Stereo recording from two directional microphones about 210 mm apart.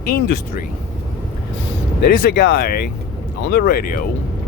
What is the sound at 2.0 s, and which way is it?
Speech, 50° left (ahead or behind).